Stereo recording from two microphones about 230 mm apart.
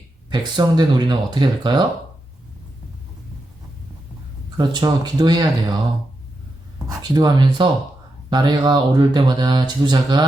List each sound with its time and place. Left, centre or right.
0.3 s speech: centre
4.5 s speech: centre
6.8 s speech: centre